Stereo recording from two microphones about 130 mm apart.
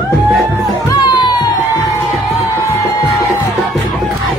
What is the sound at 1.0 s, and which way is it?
Music, 35° left (ahead or behind).